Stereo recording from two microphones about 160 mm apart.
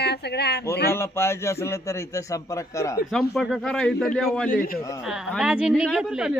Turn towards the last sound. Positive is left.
turn(degrees=-5)  # may be behind; listen again after turning